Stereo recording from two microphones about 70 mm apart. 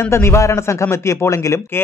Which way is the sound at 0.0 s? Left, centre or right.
Left.